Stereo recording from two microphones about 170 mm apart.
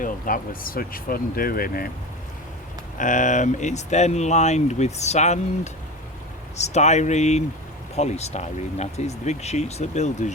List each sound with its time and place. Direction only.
0.0 s speech: 55° left (ahead or behind)
3.0 s speech: 50° left (ahead or behind)
6.6 s speech: 40° left (ahead or behind)